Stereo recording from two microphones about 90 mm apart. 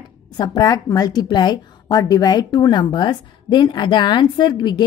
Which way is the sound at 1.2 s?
55° left (ahead or behind).